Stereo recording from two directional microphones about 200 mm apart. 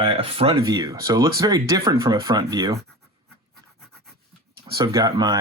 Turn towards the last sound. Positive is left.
turn(degrees=-20)  # may be behind; listen again after turning